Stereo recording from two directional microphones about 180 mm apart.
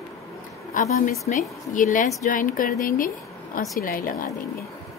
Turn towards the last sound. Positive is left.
turn(degrees=50)  # may be behind; listen again after turning